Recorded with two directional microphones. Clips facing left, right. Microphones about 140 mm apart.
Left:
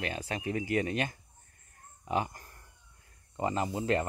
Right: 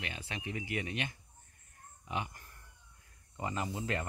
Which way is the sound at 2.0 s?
40° left (ahead or behind).